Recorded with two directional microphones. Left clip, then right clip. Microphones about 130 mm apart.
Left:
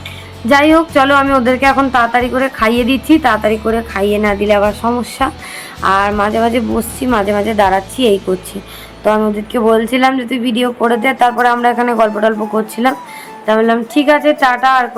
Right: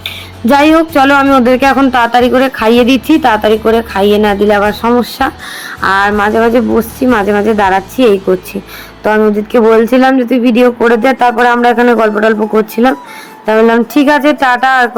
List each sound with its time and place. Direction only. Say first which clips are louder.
0.0 s speech: right 7 dB; 45° right (ahead or behind)
1.6 s speech: right 2 dB; 55° right (ahead or behind); by 8.0 s 5° right (ahead or behind)
9.0 s speech: right 4 dB; 25° right (ahead or behind)
13.6 s speech: right 7 dB; 45° right (ahead or behind)